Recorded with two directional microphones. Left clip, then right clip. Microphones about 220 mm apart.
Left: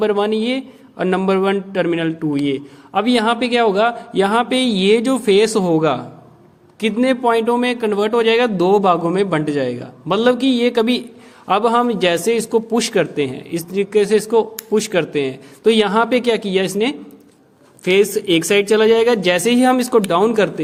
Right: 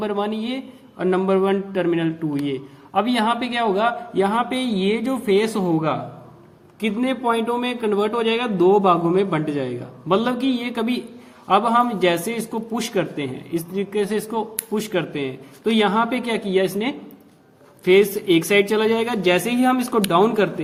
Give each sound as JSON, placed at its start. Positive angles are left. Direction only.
{"t": 0.0, "sound": "a man's voice", "side_deg": 40}